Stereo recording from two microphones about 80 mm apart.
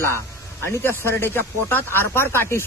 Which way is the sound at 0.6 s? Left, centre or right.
Left.